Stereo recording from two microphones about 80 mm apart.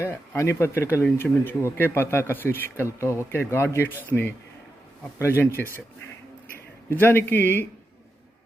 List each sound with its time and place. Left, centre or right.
0.1 s a man's voice: left
6.9 s a man's voice: left